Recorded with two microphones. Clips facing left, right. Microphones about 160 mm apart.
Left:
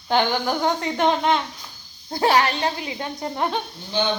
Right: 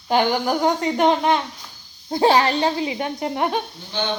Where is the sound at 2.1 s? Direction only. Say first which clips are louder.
Right 3 dB; 25° right (ahead or behind).